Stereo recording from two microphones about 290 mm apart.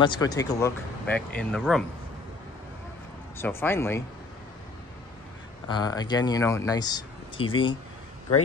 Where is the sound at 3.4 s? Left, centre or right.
Centre.